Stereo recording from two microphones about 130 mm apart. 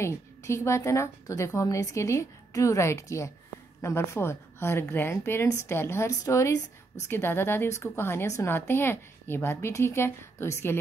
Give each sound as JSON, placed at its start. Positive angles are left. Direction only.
{"t": 0.0, "sound": "a woman's voice", "side_deg": 20}